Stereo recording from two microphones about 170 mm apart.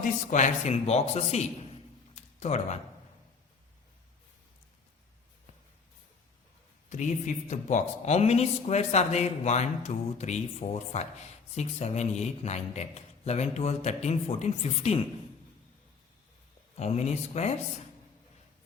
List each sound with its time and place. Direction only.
0.0 s a man's voice: 50° left (ahead or behind)
6.9 s a man's voice: 45° left (ahead or behind)
16.7 s a man's voice: 40° left (ahead or behind)